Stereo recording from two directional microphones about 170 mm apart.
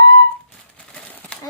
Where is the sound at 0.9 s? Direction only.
5° left (ahead or behind).